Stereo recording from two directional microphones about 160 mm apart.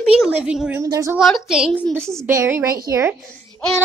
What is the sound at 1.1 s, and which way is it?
Speech, centre (ahead or behind).